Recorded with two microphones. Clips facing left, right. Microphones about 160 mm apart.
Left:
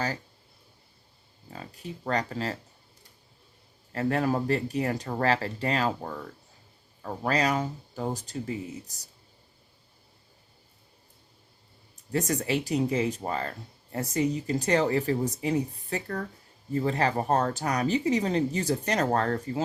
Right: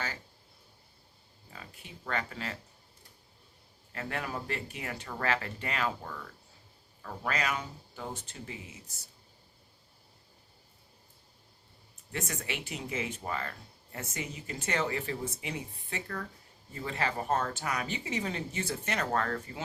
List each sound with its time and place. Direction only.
1.5 s speech: 40° left (ahead or behind)
3.9 s speech: 40° left (ahead or behind)
12.1 s speech: 35° left (ahead or behind)